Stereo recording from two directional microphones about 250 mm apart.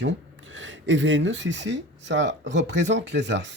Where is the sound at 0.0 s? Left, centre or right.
Right.